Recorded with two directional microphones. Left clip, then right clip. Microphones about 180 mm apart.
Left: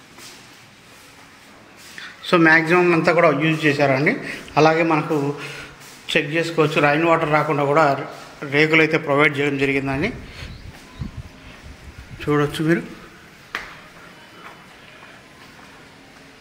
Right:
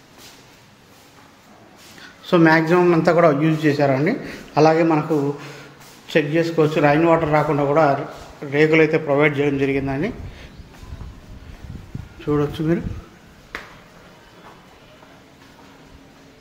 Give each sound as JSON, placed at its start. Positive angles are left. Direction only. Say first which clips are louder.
{"t": 2.2, "sound": "a man's voice", "louder": "left 1 dB", "side_deg": -15}
{"t": 12.2, "sound": "a man's voice", "louder": "left 1 dB", "side_deg": -5}